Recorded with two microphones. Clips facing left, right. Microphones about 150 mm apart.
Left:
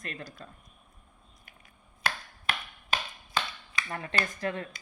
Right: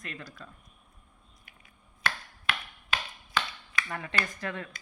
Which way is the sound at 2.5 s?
40° left (ahead or behind).